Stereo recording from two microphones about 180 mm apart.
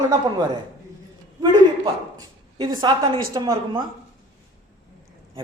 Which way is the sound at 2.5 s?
25° right (ahead or behind).